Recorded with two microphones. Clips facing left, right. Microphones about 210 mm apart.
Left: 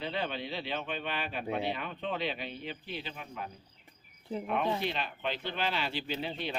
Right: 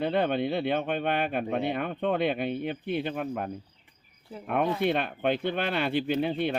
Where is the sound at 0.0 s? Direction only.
55° right (ahead or behind).